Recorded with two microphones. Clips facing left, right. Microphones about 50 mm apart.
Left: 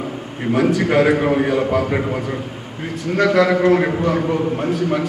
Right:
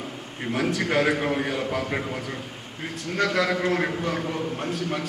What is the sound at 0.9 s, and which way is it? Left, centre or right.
A man's voice, left.